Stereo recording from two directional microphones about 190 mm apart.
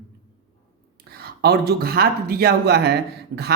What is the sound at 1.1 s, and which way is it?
Speech, 55° right (ahead or behind).